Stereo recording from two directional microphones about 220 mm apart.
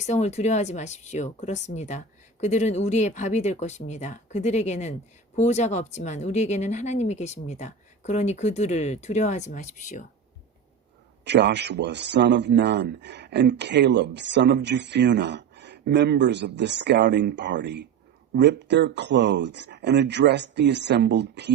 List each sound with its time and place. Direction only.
0.0 s speech: 30° left (ahead or behind)
11.3 s a man's voice: 50° right (ahead or behind)